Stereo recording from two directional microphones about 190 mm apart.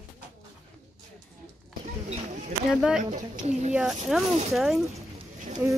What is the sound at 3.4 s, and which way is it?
Speech, 35° right (ahead or behind).